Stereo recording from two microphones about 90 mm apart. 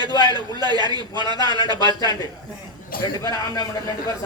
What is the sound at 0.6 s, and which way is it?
A man's voice, 50° right (ahead or behind).